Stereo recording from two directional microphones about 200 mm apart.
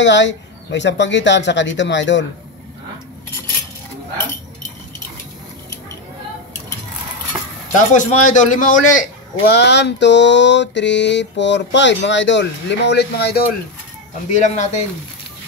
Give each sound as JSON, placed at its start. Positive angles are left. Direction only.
{"t": 0.0, "sound": "mantra", "side_deg": 65}
{"t": 7.9, "sound": "a man's voice", "side_deg": 40}
{"t": 9.4, "sound": "mantra", "side_deg": 55}
{"t": 14.3, "sound": "a man's voice", "side_deg": 35}